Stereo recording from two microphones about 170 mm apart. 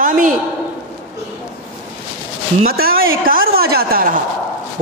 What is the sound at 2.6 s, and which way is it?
A woman's voice, 60° right (ahead or behind).